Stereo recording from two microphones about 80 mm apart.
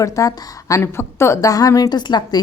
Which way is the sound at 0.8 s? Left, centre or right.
Left.